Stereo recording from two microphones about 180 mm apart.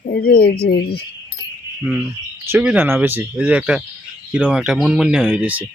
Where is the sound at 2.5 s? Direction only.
10° right (ahead or behind).